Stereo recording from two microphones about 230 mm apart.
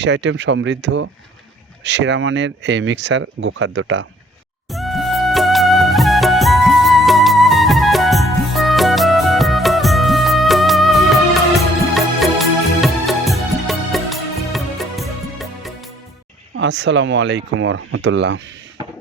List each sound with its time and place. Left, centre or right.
0.0 s speech: right
4.7 s music: centre
16.6 s speech: right